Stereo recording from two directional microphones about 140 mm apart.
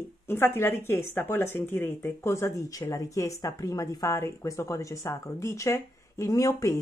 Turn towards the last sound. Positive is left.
turn(degrees=20)  # may be behind; listen again after turning